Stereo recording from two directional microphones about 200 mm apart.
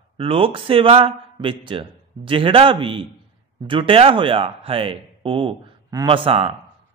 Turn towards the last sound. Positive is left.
turn(degrees=-25)  # may be behind; listen again after turning